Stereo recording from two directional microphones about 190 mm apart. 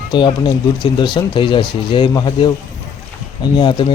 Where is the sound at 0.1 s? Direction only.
25° left (ahead or behind).